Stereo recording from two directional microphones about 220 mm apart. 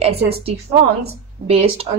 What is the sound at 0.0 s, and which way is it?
A woman's voice, 25° right (ahead or behind).